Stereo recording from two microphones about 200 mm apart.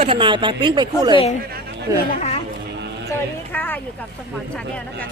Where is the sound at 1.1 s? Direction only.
30° left (ahead or behind).